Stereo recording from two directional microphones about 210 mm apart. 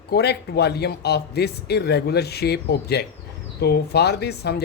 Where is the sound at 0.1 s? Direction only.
50° left (ahead or behind).